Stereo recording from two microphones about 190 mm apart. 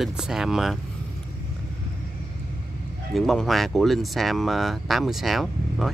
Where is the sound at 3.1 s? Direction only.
Centre (ahead or behind).